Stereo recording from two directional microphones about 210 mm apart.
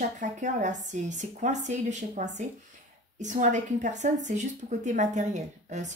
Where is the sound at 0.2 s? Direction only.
35° right (ahead or behind).